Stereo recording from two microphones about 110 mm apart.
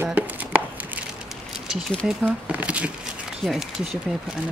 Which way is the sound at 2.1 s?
5° right (ahead or behind).